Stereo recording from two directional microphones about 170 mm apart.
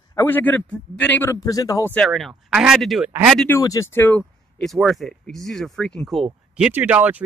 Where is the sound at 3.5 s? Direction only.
20° left (ahead or behind).